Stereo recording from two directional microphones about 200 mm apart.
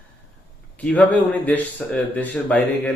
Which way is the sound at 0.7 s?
5° left (ahead or behind).